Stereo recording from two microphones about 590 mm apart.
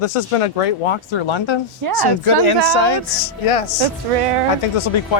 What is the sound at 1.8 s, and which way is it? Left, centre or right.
Speech, right.